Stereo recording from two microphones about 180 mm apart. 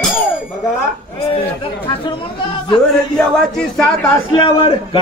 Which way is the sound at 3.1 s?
5° left (ahead or behind).